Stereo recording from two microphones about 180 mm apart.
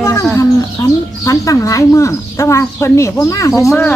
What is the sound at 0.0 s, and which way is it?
Livestock, 15° left (ahead or behind).